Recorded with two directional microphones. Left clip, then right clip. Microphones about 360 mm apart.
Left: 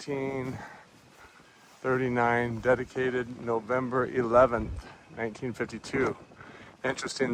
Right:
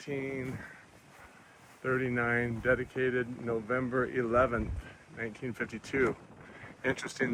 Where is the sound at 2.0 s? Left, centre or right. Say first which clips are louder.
Left 7 dB; left.